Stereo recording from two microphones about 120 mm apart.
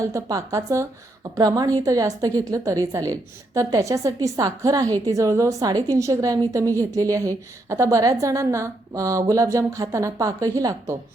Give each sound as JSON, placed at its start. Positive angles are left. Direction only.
{"t": 0.0, "sound": "a woman's voice", "side_deg": -25}